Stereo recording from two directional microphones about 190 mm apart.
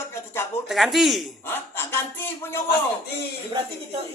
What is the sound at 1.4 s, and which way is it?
Speech, 10° left (ahead or behind).